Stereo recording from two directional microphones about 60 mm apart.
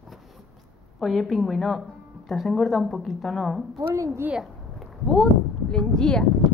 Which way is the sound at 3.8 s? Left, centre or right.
Right.